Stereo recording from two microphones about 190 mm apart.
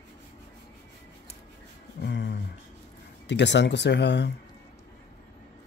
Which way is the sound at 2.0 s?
65° left (ahead or behind).